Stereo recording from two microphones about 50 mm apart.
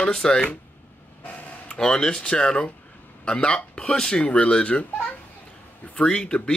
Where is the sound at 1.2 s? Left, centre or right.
Left.